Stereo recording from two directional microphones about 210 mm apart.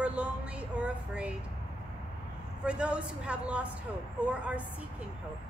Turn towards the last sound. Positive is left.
turn(degrees=-5)  # may be behind; listen again after turning